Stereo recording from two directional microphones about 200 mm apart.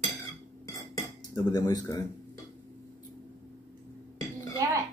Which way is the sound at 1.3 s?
20° left (ahead or behind).